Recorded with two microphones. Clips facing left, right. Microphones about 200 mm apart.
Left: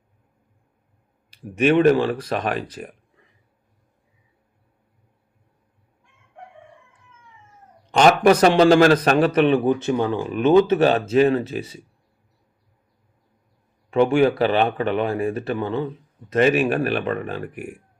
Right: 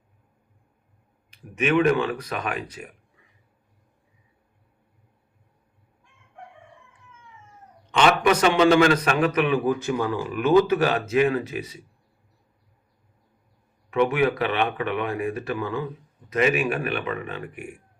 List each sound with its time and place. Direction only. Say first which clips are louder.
1.6 s speech: left 5 dB; 35° left (ahead or behind)
7.9 s a man's voice: left 5 dB; 40° left (ahead or behind)
13.9 s a man's voice: left 4 dB; 30° left (ahead or behind)